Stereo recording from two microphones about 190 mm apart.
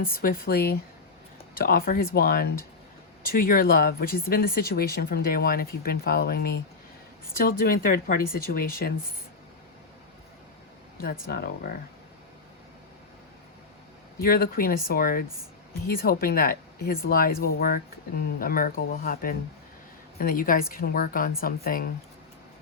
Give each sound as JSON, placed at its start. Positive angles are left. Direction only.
{"t": 0.0, "sound": "speech", "side_deg": 50}
{"t": 11.0, "sound": "speech", "side_deg": 55}
{"t": 14.2, "sound": "speech", "side_deg": 50}